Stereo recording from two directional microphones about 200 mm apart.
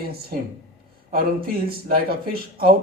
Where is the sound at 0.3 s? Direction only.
45° right (ahead or behind).